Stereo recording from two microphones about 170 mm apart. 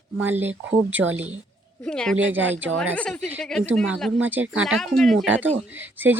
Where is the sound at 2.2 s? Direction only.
10° right (ahead or behind).